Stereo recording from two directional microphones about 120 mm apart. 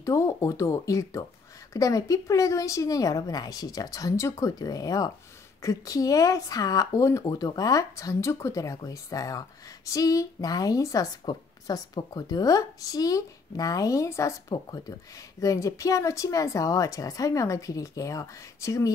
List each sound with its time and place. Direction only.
0.0 s speech: 25° left (ahead or behind)